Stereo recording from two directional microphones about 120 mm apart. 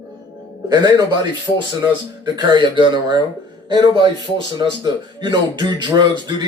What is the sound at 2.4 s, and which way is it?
A man's voice, 40° right (ahead or behind).